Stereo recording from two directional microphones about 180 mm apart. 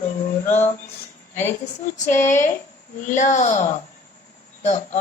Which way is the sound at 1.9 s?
40° left (ahead or behind).